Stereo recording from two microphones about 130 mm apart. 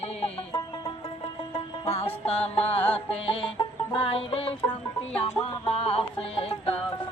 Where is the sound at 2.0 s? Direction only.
50° left (ahead or behind).